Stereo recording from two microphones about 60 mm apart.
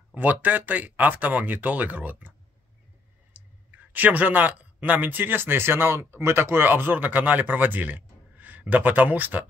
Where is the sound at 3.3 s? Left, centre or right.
Right.